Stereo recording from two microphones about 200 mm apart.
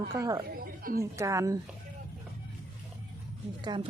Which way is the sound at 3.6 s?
20° right (ahead or behind).